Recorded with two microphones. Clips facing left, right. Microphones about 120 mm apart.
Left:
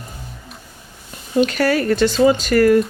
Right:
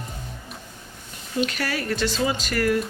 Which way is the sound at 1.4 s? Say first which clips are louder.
Left 10 dB; 50° left (ahead or behind).